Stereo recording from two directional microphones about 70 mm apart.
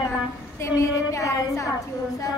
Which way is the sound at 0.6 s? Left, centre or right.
Left.